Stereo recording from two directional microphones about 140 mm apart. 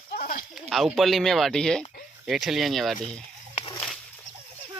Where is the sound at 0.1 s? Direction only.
90° left.